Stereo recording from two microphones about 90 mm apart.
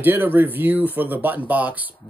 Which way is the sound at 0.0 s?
20° right (ahead or behind).